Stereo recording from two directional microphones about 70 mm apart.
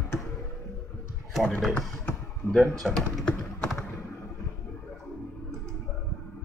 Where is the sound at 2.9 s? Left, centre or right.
Centre.